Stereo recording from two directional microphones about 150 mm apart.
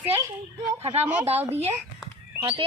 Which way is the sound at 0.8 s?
45° right (ahead or behind).